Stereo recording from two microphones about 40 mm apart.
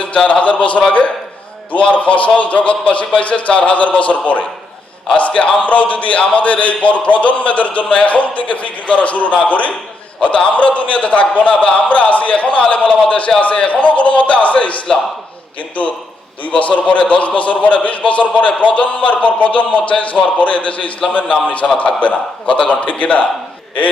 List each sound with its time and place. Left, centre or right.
0.0 s speech: left
1.8 s a man's voice: left